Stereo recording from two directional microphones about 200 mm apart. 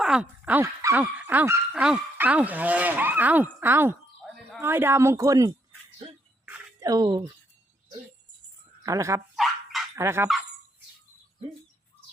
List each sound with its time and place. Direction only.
0.0 s speech: 5° right (ahead or behind)
4.2 s a sound: centre (ahead or behind)
4.6 s speech: 10° right (ahead or behind)
6.4 s a sound: 10° right (ahead or behind)
8.8 s speech: 15° right (ahead or behind)
9.3 s dog: centre (ahead or behind)
9.9 s speech: 15° right (ahead or behind)